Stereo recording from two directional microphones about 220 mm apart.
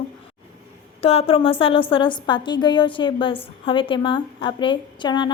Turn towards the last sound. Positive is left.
turn(degrees=20)  # may be behind; listen again after turning